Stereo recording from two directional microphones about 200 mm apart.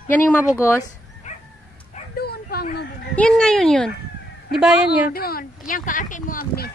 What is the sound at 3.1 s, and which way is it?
A woman's voice, 5° left (ahead or behind).